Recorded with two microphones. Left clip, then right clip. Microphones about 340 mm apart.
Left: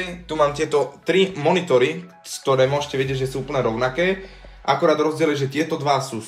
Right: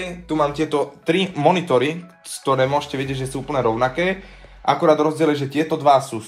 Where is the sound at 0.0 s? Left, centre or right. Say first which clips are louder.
Left 1 dB; centre.